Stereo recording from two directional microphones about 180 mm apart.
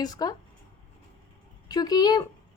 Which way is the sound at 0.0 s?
20° left (ahead or behind).